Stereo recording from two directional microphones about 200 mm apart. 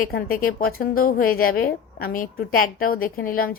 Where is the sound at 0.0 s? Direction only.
45° left (ahead or behind).